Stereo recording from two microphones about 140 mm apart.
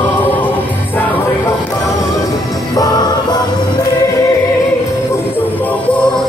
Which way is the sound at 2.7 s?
30° left (ahead or behind).